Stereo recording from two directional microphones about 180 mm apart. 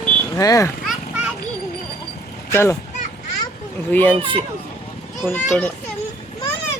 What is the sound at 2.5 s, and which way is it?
Speech, 15° left (ahead or behind).